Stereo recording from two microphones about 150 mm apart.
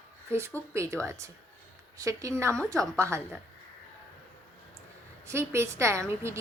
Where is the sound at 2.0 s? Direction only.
20° right (ahead or behind).